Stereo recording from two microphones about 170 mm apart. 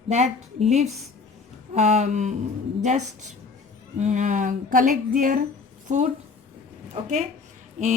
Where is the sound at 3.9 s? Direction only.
45° right (ahead or behind).